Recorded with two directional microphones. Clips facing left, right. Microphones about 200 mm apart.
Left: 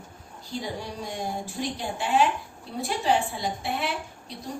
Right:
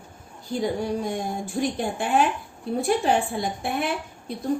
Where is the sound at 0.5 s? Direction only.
50° right (ahead or behind).